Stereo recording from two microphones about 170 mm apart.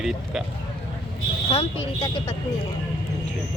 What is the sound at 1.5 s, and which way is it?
Speech, 30° left (ahead or behind).